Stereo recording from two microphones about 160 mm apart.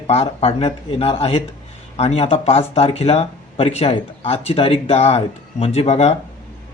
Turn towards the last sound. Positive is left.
turn(degrees=40)  # may be behind; listen again after turning